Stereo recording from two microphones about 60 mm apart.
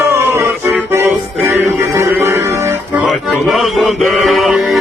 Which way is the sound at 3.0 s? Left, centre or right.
Centre.